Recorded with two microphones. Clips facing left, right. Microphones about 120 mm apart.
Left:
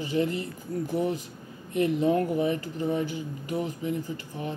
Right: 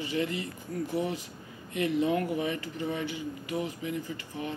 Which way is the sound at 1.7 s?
45° left (ahead or behind).